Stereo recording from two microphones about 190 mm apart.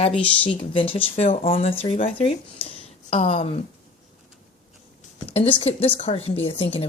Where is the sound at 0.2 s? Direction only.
30° left (ahead or behind).